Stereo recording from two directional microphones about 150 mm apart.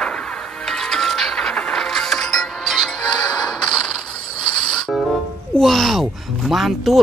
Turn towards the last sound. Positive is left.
turn(degrees=0)  # may be behind; listen again after turning